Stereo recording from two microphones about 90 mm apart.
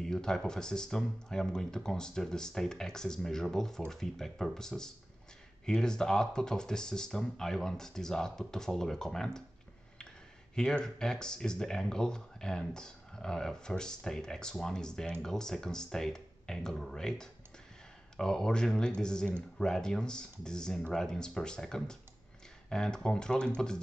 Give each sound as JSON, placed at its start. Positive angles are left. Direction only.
{"t": 0.0, "sound": "speech", "side_deg": 5}
{"t": 10.5, "sound": "speech", "side_deg": 10}